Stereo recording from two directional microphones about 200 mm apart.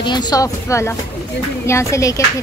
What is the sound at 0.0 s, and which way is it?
Speech, 20° left (ahead or behind).